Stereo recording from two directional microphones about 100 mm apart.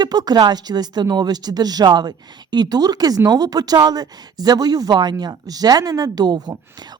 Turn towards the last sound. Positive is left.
turn(degrees=-45)  # may be behind; listen again after turning